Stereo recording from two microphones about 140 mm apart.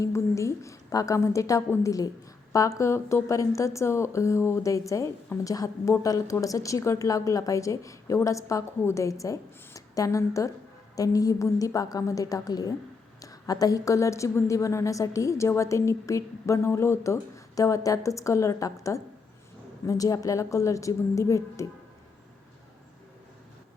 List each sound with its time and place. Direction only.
0.0 s a woman's voice: 20° left (ahead or behind)